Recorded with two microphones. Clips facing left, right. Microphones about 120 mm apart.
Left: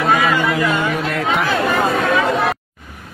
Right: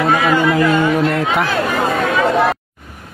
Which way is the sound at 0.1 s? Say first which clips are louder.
Right 1 dB; 30° right (ahead or behind).